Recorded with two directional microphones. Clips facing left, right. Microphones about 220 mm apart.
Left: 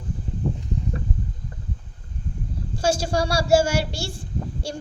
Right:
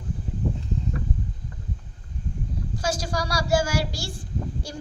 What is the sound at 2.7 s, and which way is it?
A child's voice, 30° left (ahead or behind).